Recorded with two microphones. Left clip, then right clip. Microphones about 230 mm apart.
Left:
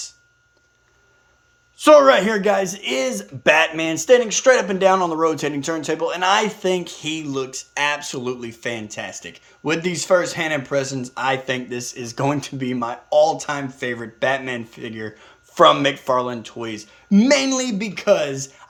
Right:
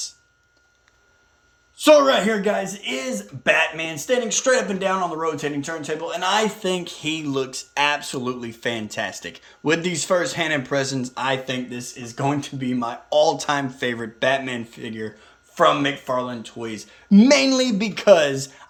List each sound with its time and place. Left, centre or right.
1.8 s speech: centre
4.9 s speech: left
6.1 s speech: centre
15.5 s speech: left; by 18.4 s centre